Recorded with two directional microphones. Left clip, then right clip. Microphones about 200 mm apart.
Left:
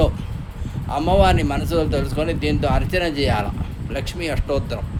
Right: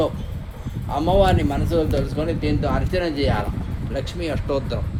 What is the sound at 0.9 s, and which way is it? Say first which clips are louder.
A man's voice: left 1 dB; 40° left (ahead or behind).